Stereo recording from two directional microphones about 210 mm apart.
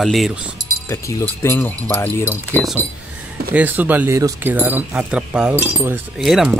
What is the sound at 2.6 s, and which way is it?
Speech, centre (ahead or behind).